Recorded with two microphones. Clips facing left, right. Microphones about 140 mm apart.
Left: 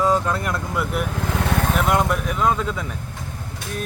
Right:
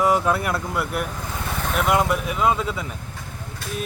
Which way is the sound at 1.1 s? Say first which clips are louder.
Left 7 dB; 80° left.